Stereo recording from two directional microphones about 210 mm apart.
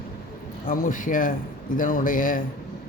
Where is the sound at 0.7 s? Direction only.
40° left (ahead or behind).